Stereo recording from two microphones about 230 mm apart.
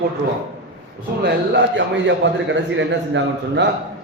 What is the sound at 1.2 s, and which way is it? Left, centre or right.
Speech, right.